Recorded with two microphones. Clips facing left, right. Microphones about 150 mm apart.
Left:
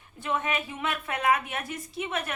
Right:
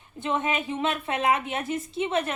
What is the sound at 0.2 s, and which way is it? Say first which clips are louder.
A woman's voice: right 3 dB; 25° right (ahead or behind).